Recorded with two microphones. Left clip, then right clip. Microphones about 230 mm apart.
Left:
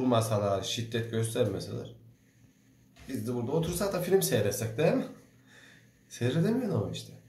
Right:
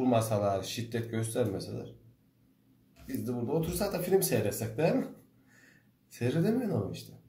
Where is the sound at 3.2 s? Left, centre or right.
Centre.